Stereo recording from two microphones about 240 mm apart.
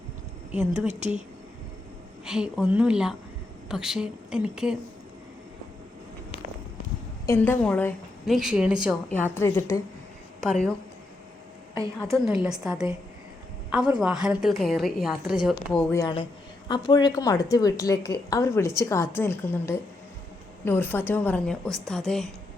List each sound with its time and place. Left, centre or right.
0.9 s a woman's voice: right
2.2 s a woman's voice: centre
7.3 s a woman's voice: centre
10.4 s a woman's voice: centre
11.9 s a woman's voice: centre